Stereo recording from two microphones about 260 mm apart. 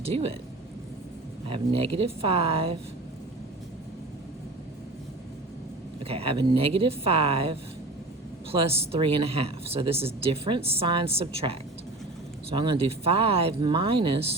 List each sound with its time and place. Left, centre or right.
0.0 s speech: right
1.5 s speech: right
6.1 s speech: right
8.5 s speech: right